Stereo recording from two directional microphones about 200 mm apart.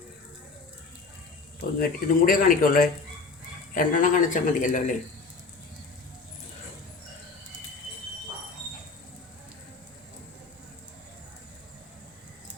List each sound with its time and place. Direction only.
1.8 s a man's voice: 45° left (ahead or behind)